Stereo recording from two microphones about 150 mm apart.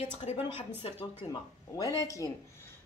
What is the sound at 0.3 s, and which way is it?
Speech, 45° left (ahead or behind).